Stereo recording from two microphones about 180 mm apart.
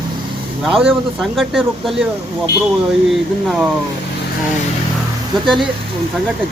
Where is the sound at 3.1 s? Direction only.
Centre (ahead or behind).